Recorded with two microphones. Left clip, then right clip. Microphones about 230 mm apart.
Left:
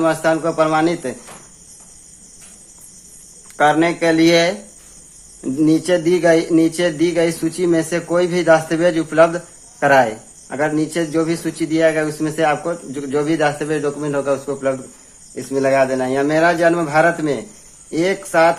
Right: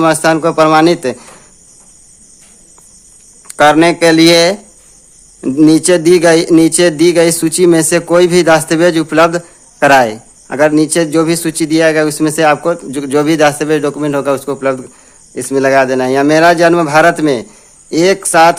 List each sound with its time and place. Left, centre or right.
0.0 s speech: right
3.5 s speech: right